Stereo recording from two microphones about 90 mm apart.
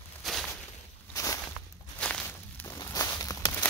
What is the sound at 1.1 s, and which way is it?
Walk, 35° left (ahead or behind).